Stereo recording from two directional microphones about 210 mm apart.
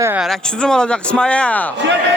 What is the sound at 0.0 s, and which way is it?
Speech, 10° right (ahead or behind).